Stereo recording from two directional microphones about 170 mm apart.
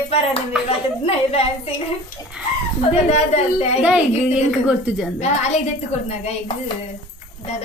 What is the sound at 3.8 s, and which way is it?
A woman's voice, 5° right (ahead or behind).